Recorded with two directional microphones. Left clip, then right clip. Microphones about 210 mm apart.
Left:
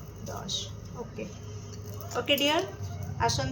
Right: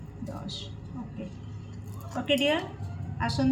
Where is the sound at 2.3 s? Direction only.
50° left (ahead or behind).